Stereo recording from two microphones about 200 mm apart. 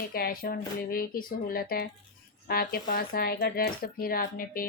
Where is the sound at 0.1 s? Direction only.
45° left (ahead or behind).